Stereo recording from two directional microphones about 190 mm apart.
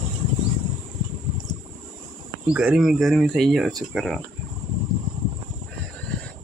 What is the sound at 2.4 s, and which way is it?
Speech, 5° right (ahead or behind).